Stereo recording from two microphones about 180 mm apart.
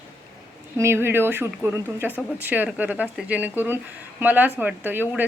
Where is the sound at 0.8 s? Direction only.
15° right (ahead or behind).